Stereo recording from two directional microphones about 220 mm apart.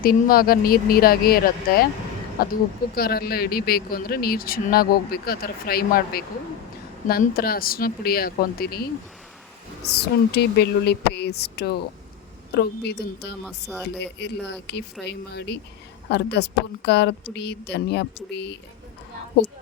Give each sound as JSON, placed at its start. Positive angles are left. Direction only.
{"t": 0.0, "sound": "speech", "side_deg": 40}
{"t": 9.8, "sound": "speech", "side_deg": 50}
{"t": 13.4, "sound": "speech", "side_deg": 0}
{"t": 14.0, "sound": "speech", "side_deg": 50}